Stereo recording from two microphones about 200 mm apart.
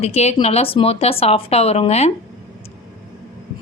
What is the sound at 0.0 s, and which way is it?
A woman's voice, 30° left (ahead or behind).